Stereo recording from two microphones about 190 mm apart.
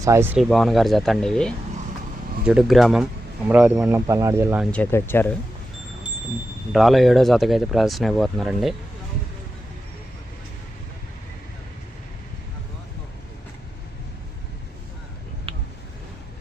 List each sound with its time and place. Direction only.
0.0 s speech: 15° right (ahead or behind)
0.5 s speech: centre (ahead or behind)
4.6 s speech: 10° left (ahead or behind)
6.7 s speech: centre (ahead or behind)
15.5 s a sound: 30° right (ahead or behind)